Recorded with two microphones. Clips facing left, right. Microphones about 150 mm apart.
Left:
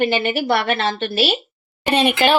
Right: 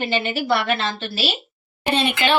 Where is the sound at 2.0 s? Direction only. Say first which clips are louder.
Left 6 dB; 45° left (ahead or behind).